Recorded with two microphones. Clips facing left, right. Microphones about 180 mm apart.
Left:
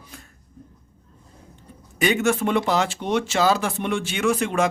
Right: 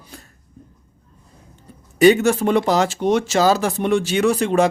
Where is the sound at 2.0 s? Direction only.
35° right (ahead or behind).